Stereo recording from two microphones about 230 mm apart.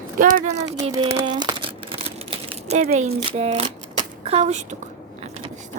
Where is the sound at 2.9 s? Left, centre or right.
Right.